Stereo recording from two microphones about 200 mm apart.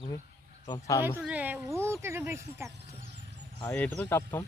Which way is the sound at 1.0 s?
10° right (ahead or behind).